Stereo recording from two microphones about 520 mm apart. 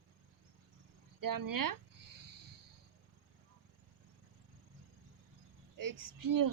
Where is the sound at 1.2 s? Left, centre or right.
Right.